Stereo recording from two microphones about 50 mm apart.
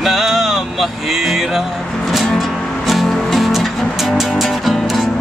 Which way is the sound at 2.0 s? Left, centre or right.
Centre.